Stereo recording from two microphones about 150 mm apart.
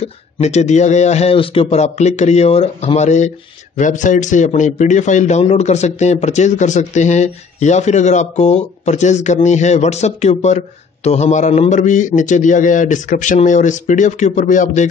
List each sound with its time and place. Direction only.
0.4 s a man's voice: 50° left (ahead or behind)